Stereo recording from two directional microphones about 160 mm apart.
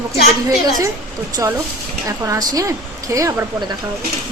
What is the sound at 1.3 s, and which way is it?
Speech, 20° right (ahead or behind).